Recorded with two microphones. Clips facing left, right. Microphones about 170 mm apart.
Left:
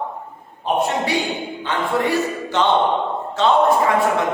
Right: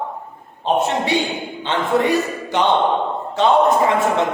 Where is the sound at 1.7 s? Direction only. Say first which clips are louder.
Right 3 dB; 20° right (ahead or behind).